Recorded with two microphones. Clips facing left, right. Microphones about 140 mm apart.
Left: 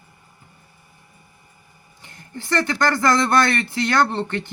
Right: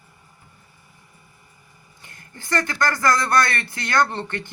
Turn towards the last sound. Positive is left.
turn(degrees=25)  # may be behind; listen again after turning